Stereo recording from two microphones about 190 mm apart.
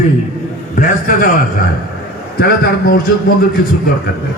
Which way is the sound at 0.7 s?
45° left (ahead or behind).